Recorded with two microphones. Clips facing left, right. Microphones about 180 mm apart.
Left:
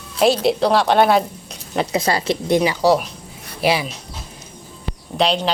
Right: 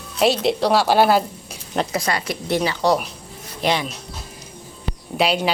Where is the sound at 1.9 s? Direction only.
25° left (ahead or behind); by 3.9 s 10° left (ahead or behind).